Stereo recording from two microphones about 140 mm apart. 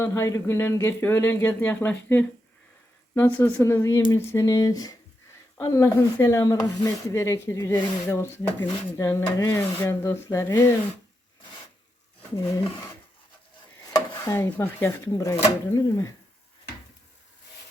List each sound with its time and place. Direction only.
0.0 s speech: 20° left (ahead or behind)
12.4 s speech: 20° left (ahead or behind)
14.3 s speech: 15° left (ahead or behind)